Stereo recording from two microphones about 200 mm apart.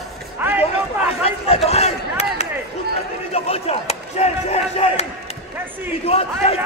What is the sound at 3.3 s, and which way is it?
Battle cry, 30° left (ahead or behind).